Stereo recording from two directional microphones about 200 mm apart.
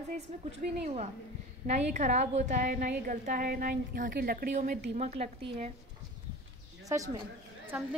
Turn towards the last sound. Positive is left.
turn(degrees=-10)  # may be behind; listen again after turning